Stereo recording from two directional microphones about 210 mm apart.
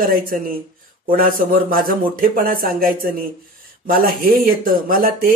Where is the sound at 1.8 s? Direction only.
40° right (ahead or behind).